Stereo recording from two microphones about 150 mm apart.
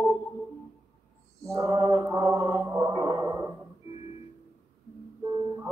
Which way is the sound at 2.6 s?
15° right (ahead or behind).